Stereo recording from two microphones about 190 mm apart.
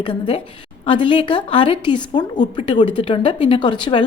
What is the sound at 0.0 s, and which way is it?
A woman's voice, 30° left (ahead or behind).